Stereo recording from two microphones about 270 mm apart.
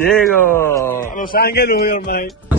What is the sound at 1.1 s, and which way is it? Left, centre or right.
A man's voice, left.